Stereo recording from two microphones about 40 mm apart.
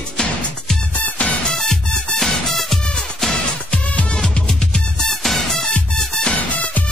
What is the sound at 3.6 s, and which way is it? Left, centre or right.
Music, left.